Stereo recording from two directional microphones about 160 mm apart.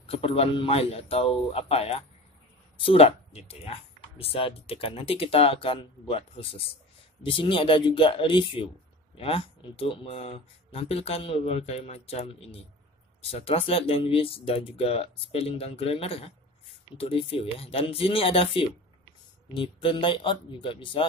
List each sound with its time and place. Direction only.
0.0 s speech: 35° left (ahead or behind)